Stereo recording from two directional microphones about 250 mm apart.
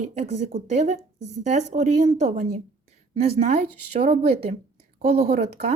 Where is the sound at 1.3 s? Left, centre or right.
Right.